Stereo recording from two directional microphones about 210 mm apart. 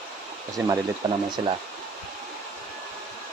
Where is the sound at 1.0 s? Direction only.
20° right (ahead or behind).